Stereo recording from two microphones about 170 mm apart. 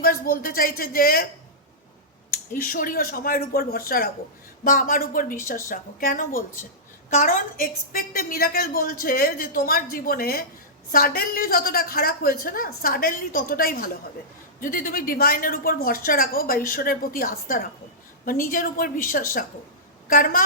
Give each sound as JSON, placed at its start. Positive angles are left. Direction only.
{"t": 0.0, "sound": "a woman's voice", "side_deg": 60}
{"t": 2.3, "sound": "a woman's voice", "side_deg": 55}